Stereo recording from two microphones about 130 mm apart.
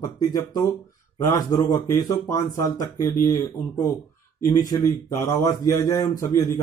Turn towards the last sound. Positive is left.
turn(degrees=25)  # may be behind; listen again after turning